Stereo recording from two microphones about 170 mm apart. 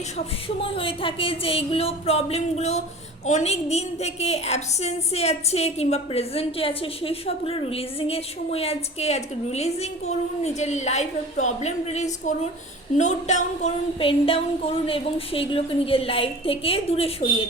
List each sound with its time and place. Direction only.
0.4 s a woman's voice: 30° left (ahead or behind)